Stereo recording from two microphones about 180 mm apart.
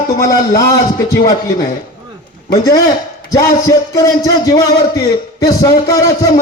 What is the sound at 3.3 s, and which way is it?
Speech, 15° left (ahead or behind).